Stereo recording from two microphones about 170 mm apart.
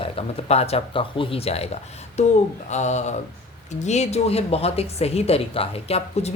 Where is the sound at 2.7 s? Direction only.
45° left (ahead or behind).